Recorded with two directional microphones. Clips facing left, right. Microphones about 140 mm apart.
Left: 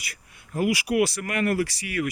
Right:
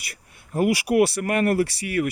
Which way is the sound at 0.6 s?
55° right (ahead or behind).